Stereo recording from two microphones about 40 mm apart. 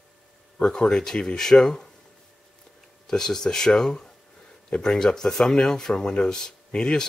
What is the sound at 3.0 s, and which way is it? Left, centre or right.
Speech, centre.